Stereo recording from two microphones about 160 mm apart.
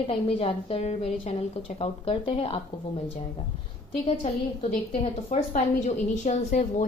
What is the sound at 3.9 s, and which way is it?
A woman's voice, 45° left (ahead or behind).